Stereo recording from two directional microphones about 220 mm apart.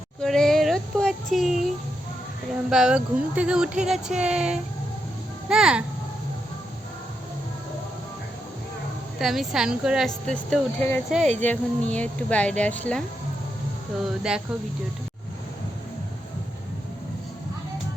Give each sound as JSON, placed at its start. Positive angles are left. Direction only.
{"t": 0.2, "sound": "a sound", "side_deg": 0}
{"t": 2.6, "sound": "speech", "side_deg": 0}
{"t": 9.1, "sound": "speech", "side_deg": 0}
{"t": 11.2, "sound": "speech", "side_deg": -30}
{"t": 11.4, "sound": "speech", "side_deg": 5}
{"t": 14.0, "sound": "speech", "side_deg": 0}